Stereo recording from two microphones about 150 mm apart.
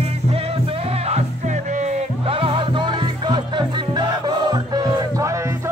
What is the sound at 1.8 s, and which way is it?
Music, 40° right (ahead or behind).